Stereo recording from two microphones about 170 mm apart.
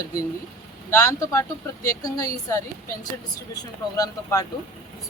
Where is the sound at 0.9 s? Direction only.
15° left (ahead or behind).